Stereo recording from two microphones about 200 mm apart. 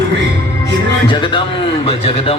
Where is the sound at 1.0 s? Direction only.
25° left (ahead or behind).